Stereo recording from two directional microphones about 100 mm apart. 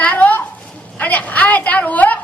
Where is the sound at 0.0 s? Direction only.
15° left (ahead or behind).